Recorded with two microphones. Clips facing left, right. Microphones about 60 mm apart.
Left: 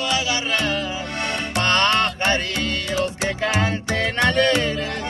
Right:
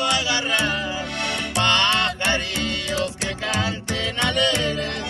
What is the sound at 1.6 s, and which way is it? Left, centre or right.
Music, left.